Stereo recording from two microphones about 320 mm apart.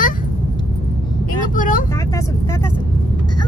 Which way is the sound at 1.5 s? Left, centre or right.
Left.